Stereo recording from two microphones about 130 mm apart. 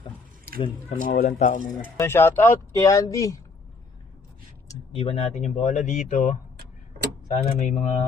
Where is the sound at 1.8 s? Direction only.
20° left (ahead or behind).